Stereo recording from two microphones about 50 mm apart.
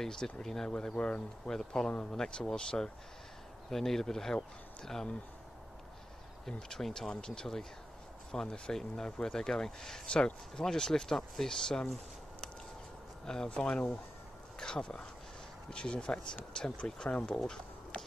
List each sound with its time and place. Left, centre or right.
0.0 s speech: centre
0.7 s speech: centre
1.5 s speech: centre
3.7 s speech: centre
6.4 s speech: centre
10.1 s speech: left
10.6 s speech: centre
13.3 s speech: centre
17.4 s a sound: centre